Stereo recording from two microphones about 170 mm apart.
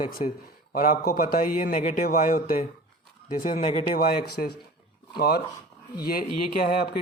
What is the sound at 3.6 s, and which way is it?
Speech, 35° left (ahead or behind).